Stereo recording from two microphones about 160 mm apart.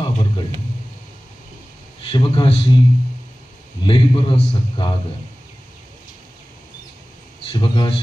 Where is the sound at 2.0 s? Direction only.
30° left (ahead or behind).